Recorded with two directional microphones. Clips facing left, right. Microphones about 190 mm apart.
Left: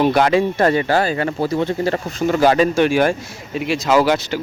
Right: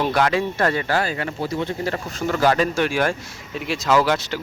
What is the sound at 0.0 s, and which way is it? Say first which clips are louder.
Speech: left 5 dB; 20° left (ahead or behind).